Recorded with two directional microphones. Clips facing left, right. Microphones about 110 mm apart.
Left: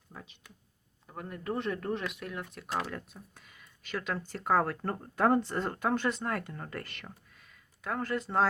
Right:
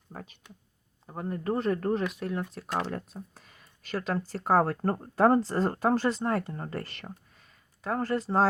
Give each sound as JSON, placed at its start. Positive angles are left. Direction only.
{"t": 0.1, "sound": "speech", "side_deg": -45}
{"t": 1.0, "sound": "speech", "side_deg": -30}